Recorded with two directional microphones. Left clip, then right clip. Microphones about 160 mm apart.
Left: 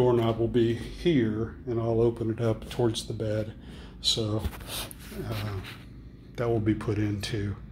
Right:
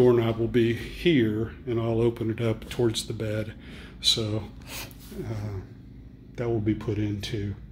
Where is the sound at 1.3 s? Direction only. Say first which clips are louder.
Right 2 dB; 30° right (ahead or behind).